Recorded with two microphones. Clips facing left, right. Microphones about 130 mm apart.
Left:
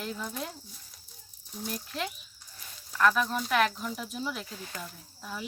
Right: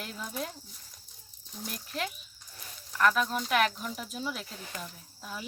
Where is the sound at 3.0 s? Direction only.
5° right (ahead or behind).